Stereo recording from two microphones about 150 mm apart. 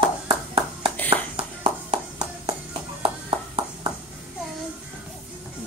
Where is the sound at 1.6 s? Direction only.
40° right (ahead or behind).